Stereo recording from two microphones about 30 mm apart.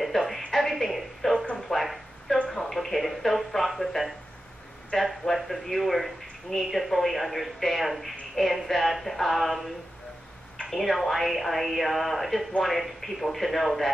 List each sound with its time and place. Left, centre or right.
0.0 s music: centre
0.5 s a sound: centre
2.4 s a sound: centre
4.9 s speech: left
5.3 s speech: centre
10.7 s speech: centre